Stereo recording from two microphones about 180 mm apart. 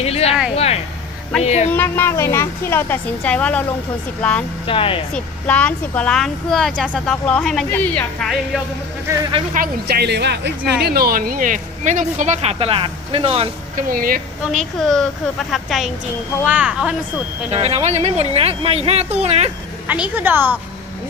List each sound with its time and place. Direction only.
0.0 s a sound: 35° left (ahead or behind)
1.4 s speech: 35° left (ahead or behind)
1.7 s a woman's voice: 15° left (ahead or behind)
4.6 s speech: 30° left (ahead or behind)
5.1 s speech: 5° left (ahead or behind)
9.1 s a woman's voice: 15° right (ahead or behind)
9.6 s a woman's voice: 60° right (ahead or behind)
10.8 s speech: 55° right (ahead or behind); by 13.8 s 35° right (ahead or behind)
13.8 s speech: 50° right (ahead or behind)
14.4 s a woman's voice: centre (ahead or behind)
17.5 s speech: 35° right (ahead or behind)
19.9 s a woman's voice: 10° right (ahead or behind)